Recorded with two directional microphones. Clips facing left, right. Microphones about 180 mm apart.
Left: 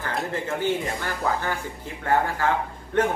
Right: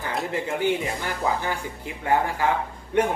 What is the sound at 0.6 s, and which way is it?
Speech, 15° right (ahead or behind).